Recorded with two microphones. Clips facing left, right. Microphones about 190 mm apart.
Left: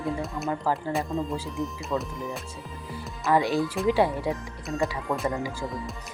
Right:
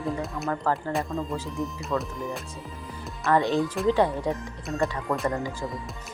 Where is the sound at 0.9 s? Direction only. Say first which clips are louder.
Left 1 dB; centre (ahead or behind).